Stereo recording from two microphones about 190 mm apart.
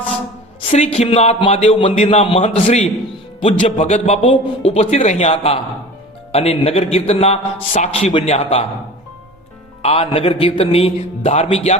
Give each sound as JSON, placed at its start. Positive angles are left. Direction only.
{"t": 0.6, "sound": "a man's voice", "side_deg": 35}
{"t": 9.8, "sound": "a man's voice", "side_deg": 30}